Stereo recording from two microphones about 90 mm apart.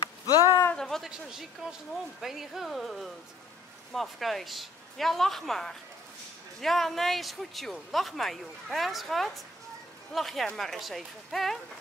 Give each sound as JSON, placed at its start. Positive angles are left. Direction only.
{"t": 0.0, "sound": "a sound", "side_deg": 40}
{"t": 0.7, "sound": "a man's voice", "side_deg": 5}
{"t": 1.1, "sound": "speech", "side_deg": -5}